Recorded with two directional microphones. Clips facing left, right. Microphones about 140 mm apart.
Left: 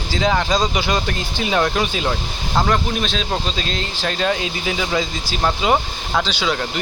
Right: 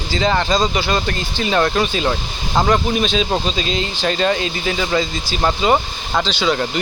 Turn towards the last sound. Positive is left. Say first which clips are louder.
# right 3 dB
turn(degrees=5)  # may be behind; listen again after turning